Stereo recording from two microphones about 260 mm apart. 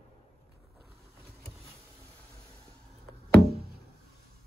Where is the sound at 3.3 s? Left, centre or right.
Right.